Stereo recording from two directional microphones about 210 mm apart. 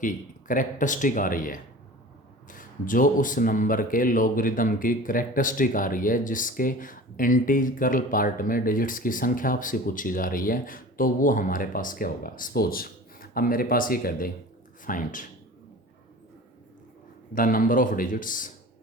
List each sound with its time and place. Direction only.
0.0 s speech: 40° left (ahead or behind)
17.3 s speech: 40° left (ahead or behind)